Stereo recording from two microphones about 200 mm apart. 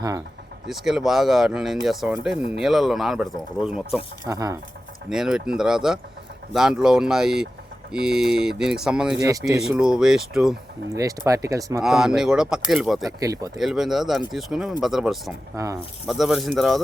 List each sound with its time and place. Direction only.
0.7 s speech: centre (ahead or behind)
4.3 s speech: 15° right (ahead or behind)
5.0 s speech: centre (ahead or behind)
9.2 s speech: 15° right (ahead or behind)
9.6 s speech: 5° right (ahead or behind)
11.3 s speech: 15° right (ahead or behind)
11.8 s speech: centre (ahead or behind)
13.1 s speech: 15° right (ahead or behind)
13.6 s speech: centre (ahead or behind)
15.5 s speech: 15° right (ahead or behind)
16.0 s speech: centre (ahead or behind)